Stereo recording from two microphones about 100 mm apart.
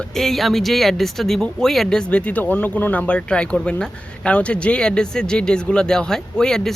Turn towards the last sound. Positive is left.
turn(degrees=5)  # may be behind; listen again after turning